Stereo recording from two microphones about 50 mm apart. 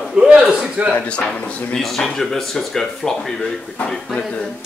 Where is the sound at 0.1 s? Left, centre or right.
Centre.